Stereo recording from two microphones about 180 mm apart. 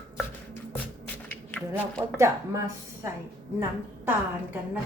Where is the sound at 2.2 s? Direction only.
15° right (ahead or behind).